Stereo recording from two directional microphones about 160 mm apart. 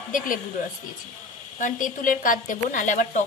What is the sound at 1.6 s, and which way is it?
A woman's voice, 55° left (ahead or behind).